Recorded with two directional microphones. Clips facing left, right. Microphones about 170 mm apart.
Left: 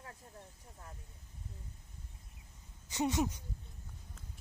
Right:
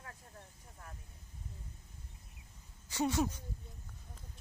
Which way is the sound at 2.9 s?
20° left (ahead or behind).